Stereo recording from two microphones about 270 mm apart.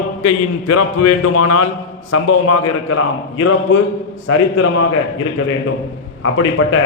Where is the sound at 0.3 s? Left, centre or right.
Left.